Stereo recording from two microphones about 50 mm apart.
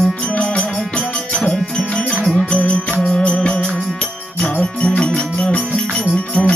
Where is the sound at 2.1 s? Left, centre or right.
Centre.